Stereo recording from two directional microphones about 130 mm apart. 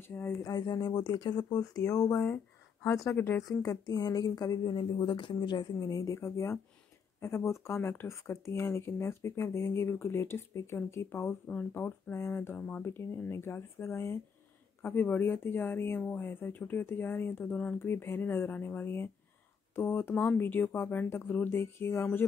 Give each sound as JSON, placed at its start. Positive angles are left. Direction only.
{"t": 0.1, "sound": "speech", "side_deg": 20}
{"t": 0.4, "sound": "speech", "side_deg": 30}
{"t": 3.4, "sound": "speech", "side_deg": 30}